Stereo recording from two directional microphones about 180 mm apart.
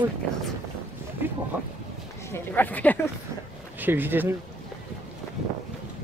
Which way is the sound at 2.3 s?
10° left (ahead or behind).